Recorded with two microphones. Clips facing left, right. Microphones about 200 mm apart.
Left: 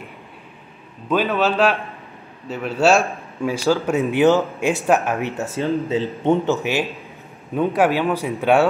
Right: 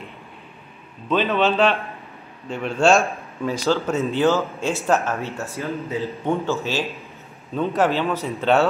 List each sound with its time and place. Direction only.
1.0 s a man's voice: 10° left (ahead or behind)
5.6 s speech: 30° left (ahead or behind)
6.2 s a man's voice: 20° left (ahead or behind)